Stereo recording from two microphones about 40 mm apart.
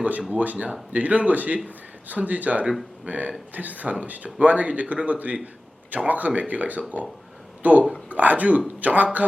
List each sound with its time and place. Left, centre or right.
0.3 s speech: right